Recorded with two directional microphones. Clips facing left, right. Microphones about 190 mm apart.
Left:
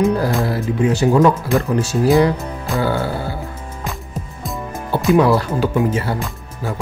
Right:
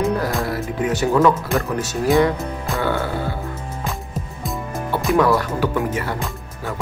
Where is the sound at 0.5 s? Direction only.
30° left (ahead or behind).